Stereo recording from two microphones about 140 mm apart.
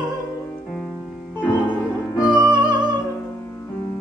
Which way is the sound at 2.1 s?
5° right (ahead or behind).